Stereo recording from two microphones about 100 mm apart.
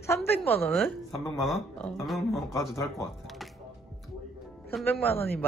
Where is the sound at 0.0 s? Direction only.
25° left (ahead or behind).